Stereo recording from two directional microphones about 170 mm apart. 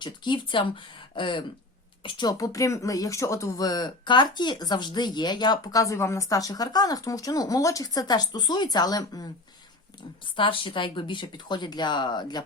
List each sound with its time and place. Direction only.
0.0 s speech: 30° left (ahead or behind)
10.3 s speech: 30° left (ahead or behind)